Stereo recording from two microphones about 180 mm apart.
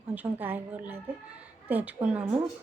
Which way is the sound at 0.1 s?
10° right (ahead or behind).